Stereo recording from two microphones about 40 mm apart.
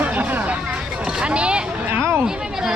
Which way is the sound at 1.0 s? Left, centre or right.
Right.